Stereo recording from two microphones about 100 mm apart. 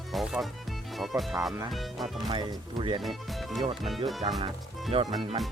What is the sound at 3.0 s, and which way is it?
Speech, centre (ahead or behind).